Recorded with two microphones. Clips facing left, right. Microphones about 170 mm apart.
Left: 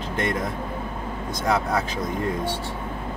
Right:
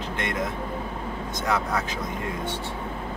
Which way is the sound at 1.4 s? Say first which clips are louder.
Left 3 dB; 35° left (ahead or behind).